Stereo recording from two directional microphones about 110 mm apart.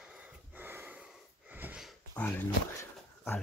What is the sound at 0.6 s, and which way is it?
Snort, 20° right (ahead or behind).